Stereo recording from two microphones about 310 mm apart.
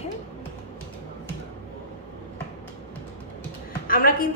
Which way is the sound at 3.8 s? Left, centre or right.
Left.